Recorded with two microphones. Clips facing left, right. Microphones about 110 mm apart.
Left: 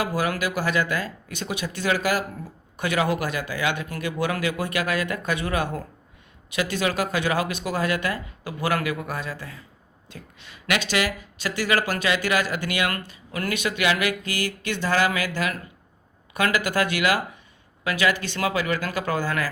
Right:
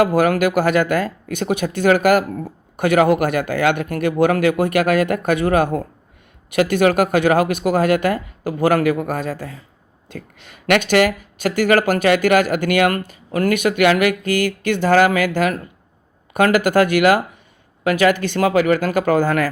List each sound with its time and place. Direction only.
0.0 s speech: 50° right (ahead or behind)